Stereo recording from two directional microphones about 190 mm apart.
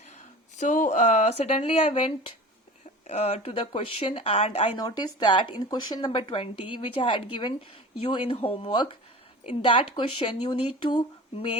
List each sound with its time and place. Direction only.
0.5 s speech: 40° left (ahead or behind)
4.8 s speech: 20° left (ahead or behind)